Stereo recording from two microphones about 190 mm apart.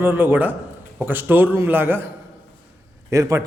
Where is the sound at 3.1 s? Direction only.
15° right (ahead or behind).